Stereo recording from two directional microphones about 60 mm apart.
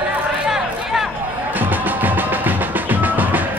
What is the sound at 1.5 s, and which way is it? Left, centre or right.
Music, right.